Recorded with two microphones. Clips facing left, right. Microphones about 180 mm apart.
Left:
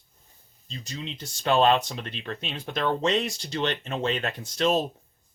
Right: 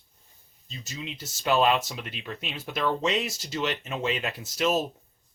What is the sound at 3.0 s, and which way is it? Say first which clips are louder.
Speech: left 2 dB; centre (ahead or behind).